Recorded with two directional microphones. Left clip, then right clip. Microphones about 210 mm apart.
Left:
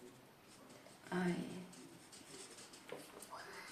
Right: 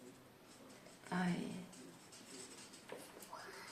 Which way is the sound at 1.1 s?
30° right (ahead or behind).